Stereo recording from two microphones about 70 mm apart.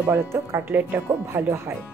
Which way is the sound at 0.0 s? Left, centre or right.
Right.